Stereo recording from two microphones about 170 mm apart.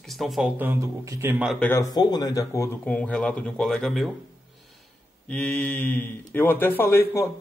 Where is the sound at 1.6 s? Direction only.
10° left (ahead or behind).